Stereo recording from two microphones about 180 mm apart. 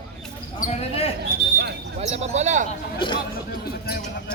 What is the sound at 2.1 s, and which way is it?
Speech, 35° right (ahead or behind).